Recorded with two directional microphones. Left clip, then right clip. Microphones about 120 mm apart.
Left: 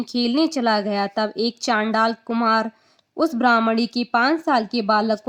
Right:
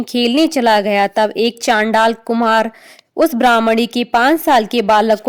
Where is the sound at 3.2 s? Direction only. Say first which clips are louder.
Right 8 dB; 60° right (ahead or behind).